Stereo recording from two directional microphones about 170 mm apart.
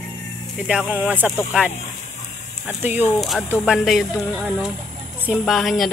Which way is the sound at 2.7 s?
10° right (ahead or behind).